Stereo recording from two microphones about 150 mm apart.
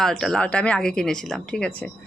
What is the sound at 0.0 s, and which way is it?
A woman's voice, 5° left (ahead or behind).